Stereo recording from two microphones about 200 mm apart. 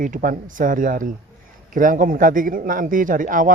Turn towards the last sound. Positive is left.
turn(degrees=-40)  # may be behind; listen again after turning